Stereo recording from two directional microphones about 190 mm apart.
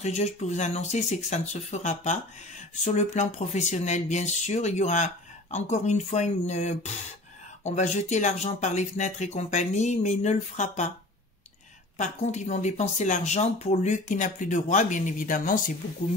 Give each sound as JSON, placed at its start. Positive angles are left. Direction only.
{"t": 0.0, "sound": "speech", "side_deg": 35}
{"t": 12.0, "sound": "speech", "side_deg": 40}